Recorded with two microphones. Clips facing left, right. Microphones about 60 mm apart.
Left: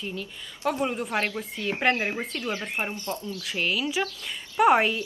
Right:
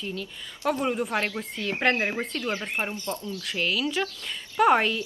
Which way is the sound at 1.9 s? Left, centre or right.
Right.